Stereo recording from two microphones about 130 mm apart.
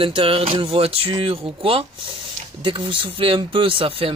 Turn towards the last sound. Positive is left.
turn(degrees=-45)  # may be behind; listen again after turning